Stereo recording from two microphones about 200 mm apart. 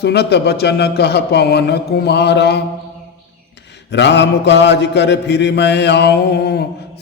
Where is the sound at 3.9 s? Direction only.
60° left (ahead or behind).